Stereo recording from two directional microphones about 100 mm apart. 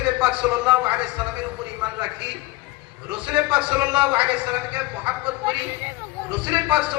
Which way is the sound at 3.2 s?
15° right (ahead or behind).